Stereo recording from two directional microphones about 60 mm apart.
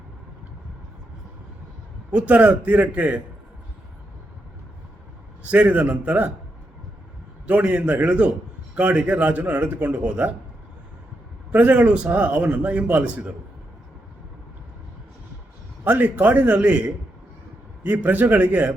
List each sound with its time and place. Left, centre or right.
2.0 s speech: right
5.4 s speech: right
7.4 s speech: right
11.5 s speech: right
15.8 s speech: right